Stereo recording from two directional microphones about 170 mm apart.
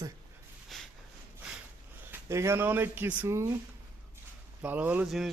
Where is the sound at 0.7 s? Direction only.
Centre (ahead or behind).